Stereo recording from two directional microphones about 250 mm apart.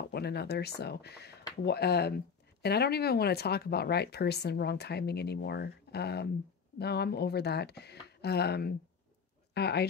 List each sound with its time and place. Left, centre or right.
0.0 s speech: left